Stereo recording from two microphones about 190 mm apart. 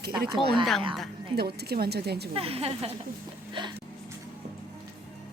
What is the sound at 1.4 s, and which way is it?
Speech, 55° right (ahead or behind).